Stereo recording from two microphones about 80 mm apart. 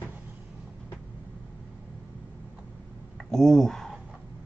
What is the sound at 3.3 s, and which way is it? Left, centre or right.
Speech, centre.